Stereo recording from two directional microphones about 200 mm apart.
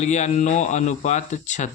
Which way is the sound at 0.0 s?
35° left (ahead or behind).